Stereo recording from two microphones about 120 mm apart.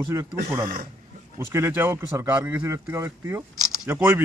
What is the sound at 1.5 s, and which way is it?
Speech, 20° right (ahead or behind).